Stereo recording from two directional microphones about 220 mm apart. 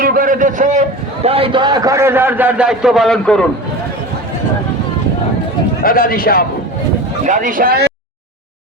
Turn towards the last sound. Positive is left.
turn(degrees=-40)  # may be behind; listen again after turning